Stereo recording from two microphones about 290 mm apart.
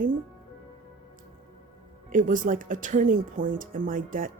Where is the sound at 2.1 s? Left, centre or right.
Right.